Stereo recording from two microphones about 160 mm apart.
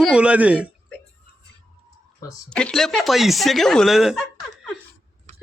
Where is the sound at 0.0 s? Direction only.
5° right (ahead or behind).